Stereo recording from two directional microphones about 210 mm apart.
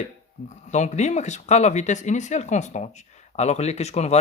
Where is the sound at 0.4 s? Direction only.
35° left (ahead or behind).